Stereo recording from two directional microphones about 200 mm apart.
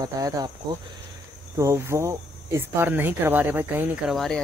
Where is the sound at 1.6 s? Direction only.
15° right (ahead or behind).